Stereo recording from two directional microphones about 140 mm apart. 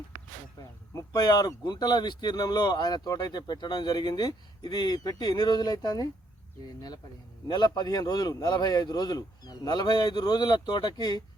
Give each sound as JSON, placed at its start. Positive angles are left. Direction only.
{"t": 0.9, "sound": "a man's voice", "side_deg": 30}
{"t": 7.4, "sound": "a man's voice", "side_deg": 30}